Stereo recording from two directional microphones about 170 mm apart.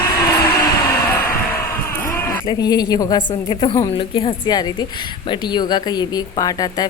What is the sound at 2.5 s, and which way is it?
Speech, 25° left (ahead or behind).